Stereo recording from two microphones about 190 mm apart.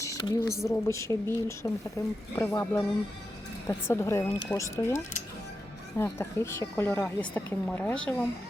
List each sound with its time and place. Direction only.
0.0 s a sound: 15° left (ahead or behind)
0.6 s a woman's voice: 15° left (ahead or behind)
6.0 s a woman's voice: 15° left (ahead or behind)